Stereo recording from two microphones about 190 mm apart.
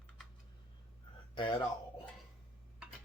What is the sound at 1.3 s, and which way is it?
Speech, 25° left (ahead or behind).